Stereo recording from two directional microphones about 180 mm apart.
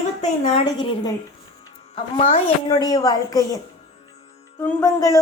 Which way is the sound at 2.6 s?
20° left (ahead or behind).